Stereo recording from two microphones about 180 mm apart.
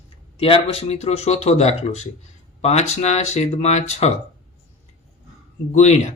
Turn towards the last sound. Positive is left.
turn(degrees=40)  # may be behind; listen again after turning